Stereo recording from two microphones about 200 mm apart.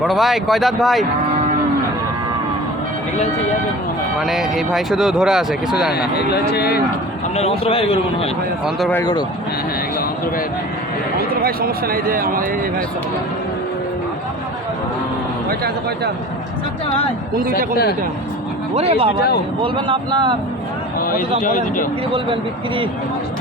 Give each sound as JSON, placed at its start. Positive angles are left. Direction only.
{"t": 0.0, "sound": "speech", "side_deg": 0}
{"t": 4.2, "sound": "speech", "side_deg": 0}
{"t": 5.9, "sound": "speech", "side_deg": 55}
{"t": 7.3, "sound": "a man's voice", "side_deg": 30}
{"t": 8.9, "sound": "speech", "side_deg": 15}
{"t": 11.2, "sound": "a man's voice", "side_deg": -50}
{"t": 15.4, "sound": "a man's voice", "side_deg": -50}
{"t": 18.7, "sound": "speech", "side_deg": -30}
{"t": 21.0, "sound": "speech", "side_deg": 45}